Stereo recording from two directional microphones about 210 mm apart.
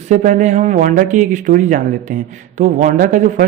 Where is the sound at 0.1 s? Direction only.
35° right (ahead or behind).